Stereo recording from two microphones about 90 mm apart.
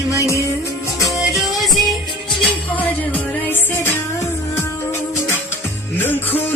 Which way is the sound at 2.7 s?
20° left (ahead or behind).